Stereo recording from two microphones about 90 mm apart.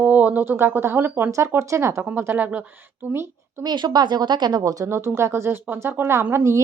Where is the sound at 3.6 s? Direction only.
50° right (ahead or behind).